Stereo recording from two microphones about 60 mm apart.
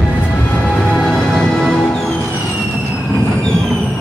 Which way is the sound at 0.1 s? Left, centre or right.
Left.